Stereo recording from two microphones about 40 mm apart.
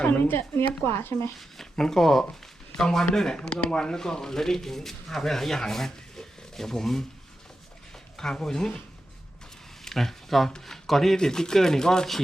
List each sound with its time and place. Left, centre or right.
0.2 s speech: left
1.7 s speech: centre
8.1 s speech: centre
9.8 s speech: centre